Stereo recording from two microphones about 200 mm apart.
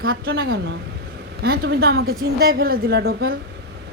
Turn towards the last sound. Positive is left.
turn(degrees=-50)  # may be behind; listen again after turning